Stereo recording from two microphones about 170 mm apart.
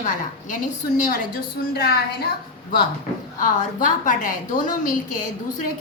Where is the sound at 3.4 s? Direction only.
50° left (ahead or behind).